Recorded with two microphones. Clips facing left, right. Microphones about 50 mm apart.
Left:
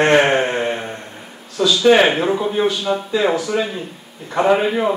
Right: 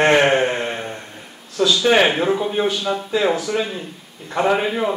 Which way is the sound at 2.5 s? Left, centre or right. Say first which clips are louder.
Left 2 dB; centre.